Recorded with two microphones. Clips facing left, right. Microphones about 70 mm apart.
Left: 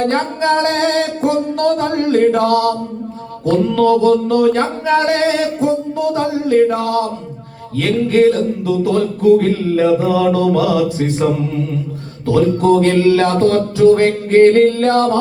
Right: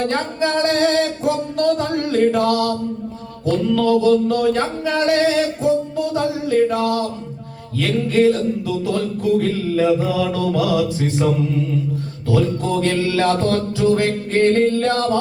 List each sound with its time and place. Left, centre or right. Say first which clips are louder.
0.1 s music: left 5 dB; left
4.9 s music: left 3 dB; left
7.8 s music: left 4 dB; left
12.3 s music: left 7 dB; left